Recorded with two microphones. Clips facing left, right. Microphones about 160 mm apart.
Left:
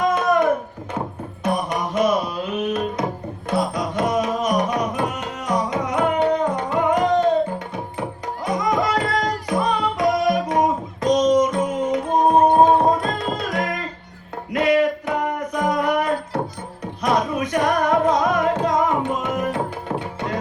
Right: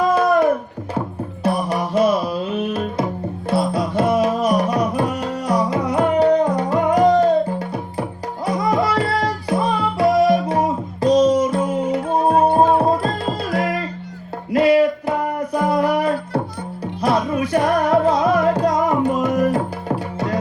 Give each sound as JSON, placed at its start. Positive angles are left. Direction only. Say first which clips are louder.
{"t": 0.1, "sound": "a sound", "louder": "right 3 dB", "side_deg": -30}
{"t": 1.5, "sound": "music", "louder": "right 2 dB", "side_deg": -30}
{"t": 8.4, "sound": "music", "louder": "right 2 dB", "side_deg": -30}